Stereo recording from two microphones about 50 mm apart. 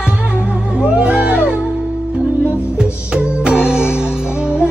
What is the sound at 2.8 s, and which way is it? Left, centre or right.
Music, centre.